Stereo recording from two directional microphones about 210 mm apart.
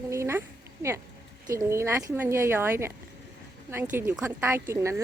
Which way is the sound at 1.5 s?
15° right (ahead or behind).